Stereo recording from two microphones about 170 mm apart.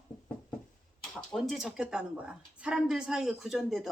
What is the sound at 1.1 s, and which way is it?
A woman's voice, centre (ahead or behind).